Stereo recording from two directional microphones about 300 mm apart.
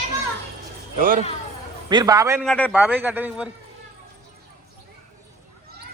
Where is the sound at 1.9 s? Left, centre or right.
Centre.